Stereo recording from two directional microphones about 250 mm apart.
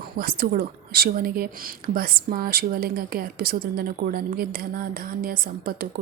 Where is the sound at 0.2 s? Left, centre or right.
Right.